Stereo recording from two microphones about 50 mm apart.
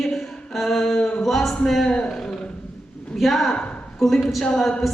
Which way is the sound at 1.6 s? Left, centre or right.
Centre.